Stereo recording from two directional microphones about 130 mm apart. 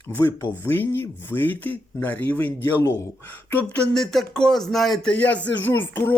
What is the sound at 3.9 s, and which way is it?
Speech, 5° left (ahead or behind).